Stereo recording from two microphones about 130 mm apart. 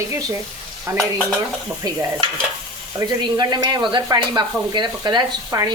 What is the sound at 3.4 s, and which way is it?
Stir, 30° right (ahead or behind).